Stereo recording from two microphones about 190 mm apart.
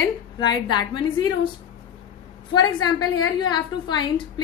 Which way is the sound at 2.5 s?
25° left (ahead or behind).